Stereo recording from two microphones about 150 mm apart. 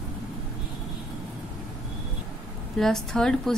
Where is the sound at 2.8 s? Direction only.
5° left (ahead or behind).